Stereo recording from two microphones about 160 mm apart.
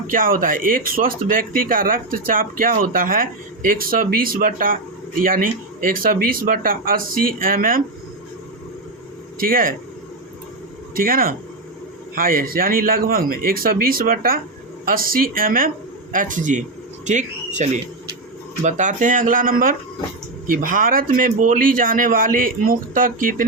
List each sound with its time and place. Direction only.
0.1 s speech: 60° right (ahead or behind)
9.4 s speech: 60° right (ahead or behind)
10.9 s speech: 65° right (ahead or behind)